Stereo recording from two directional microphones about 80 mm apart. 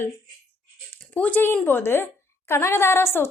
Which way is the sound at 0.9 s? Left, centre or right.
Left.